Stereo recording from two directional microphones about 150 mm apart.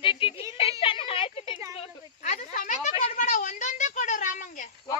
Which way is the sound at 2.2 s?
50° left (ahead or behind).